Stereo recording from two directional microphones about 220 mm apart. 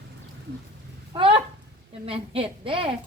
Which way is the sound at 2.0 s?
25° right (ahead or behind).